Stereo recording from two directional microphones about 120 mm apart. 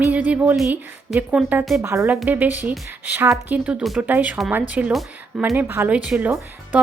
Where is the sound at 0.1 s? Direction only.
15° right (ahead or behind).